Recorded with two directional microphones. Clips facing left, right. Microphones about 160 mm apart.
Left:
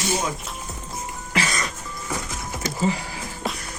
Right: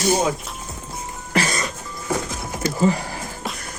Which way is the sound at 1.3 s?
40° right (ahead or behind).